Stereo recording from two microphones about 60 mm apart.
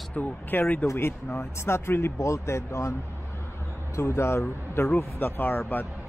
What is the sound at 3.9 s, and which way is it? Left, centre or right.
Speech, left.